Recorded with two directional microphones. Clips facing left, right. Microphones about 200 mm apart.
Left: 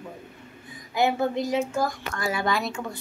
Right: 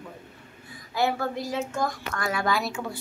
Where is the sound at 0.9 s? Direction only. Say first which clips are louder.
Left 3 dB; 20° left (ahead or behind).